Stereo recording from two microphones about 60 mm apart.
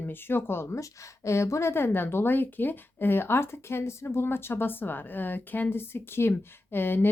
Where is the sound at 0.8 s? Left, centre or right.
Left.